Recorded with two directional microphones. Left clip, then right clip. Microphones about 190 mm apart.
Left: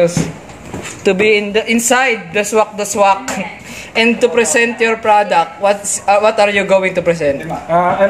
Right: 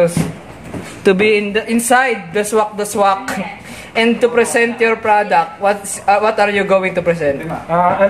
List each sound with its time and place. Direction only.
1.0 s speech: 25° right (ahead or behind)
1.5 s speech: 5° right (ahead or behind)